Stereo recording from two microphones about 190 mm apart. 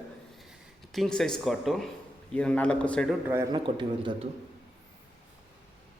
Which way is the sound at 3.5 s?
25° right (ahead or behind).